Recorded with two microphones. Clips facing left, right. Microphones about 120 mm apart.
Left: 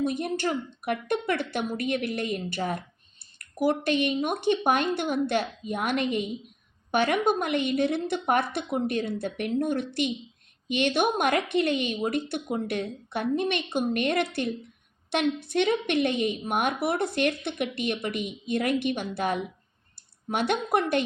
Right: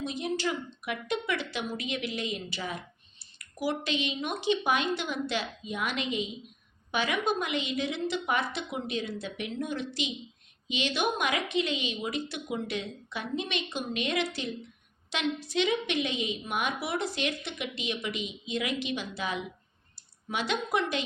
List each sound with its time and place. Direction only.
0.0 s a woman's voice: 55° left (ahead or behind)